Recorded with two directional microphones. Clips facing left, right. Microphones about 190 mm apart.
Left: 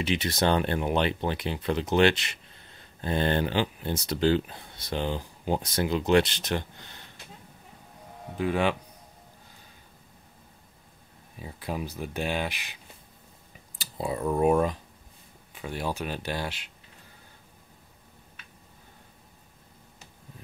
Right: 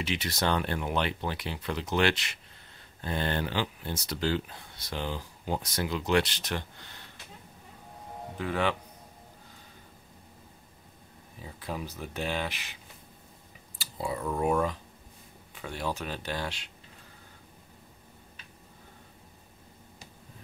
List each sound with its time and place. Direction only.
0.0 s speech: 20° left (ahead or behind)
8.4 s speech: 15° left (ahead or behind)
11.6 s speech: 15° left (ahead or behind)
13.7 s speech: 25° left (ahead or behind)
15.6 s speech: 10° left (ahead or behind)